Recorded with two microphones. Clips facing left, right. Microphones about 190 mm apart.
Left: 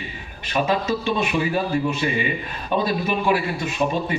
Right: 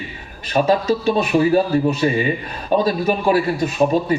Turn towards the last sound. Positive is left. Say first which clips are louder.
# right 6 dB
turn(degrees=-40)  # may be behind; listen again after turning